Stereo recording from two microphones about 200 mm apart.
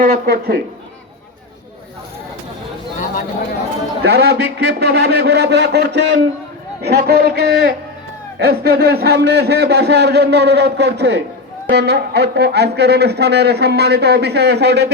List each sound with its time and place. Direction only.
0.0 s speech: 50° right (ahead or behind)
4.0 s speech: 55° right (ahead or behind)